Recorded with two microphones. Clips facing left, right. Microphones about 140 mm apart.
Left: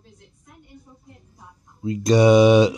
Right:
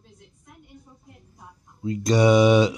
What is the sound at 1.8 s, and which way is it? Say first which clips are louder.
Speech: left 3 dB; 20° left (ahead or behind).